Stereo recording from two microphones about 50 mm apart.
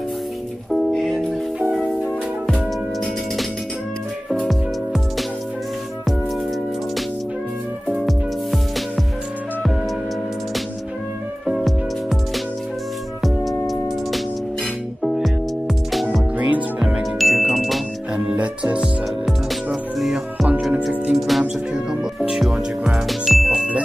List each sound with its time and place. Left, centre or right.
0.7 s music: centre
1.6 s music: centre
8.0 s music: centre
11.4 s music: centre
13.2 s music: centre
16.3 s music: right
17.2 s music: centre
18.1 s music: right
18.8 s music: centre
23.0 s music: centre